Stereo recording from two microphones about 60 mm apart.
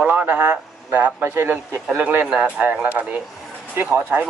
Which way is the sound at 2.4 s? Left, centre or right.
Right.